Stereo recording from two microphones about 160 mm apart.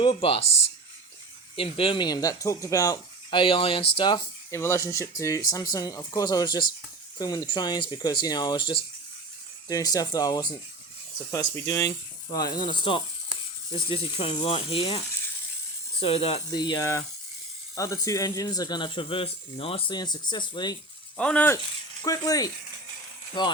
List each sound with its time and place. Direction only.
0.0 s speech: 35° left (ahead or behind)
4.5 s speech: 15° left (ahead or behind); by 16.6 s 40° left (ahead or behind)
16.6 s speech: 25° left (ahead or behind)
21.2 s speech: 10° left (ahead or behind)
22.0 s speech: 20° left (ahead or behind)